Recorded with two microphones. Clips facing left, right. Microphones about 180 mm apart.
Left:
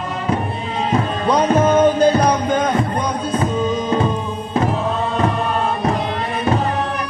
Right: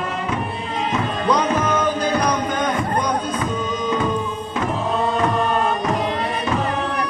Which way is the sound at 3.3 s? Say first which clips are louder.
Left 5 dB; 30° left (ahead or behind).